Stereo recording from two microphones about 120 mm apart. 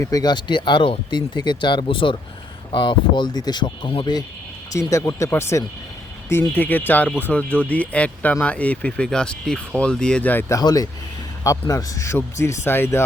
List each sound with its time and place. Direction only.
0.0 s speech: 30° left (ahead or behind)
4.7 s speech: 25° left (ahead or behind)
10.5 s speech: 30° left (ahead or behind)